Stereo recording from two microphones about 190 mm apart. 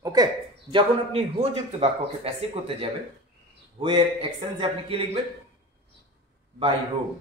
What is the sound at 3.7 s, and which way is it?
A man's voice, 25° right (ahead or behind).